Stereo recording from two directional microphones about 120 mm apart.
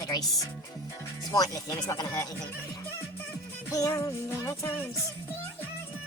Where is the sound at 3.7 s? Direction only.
30° left (ahead or behind).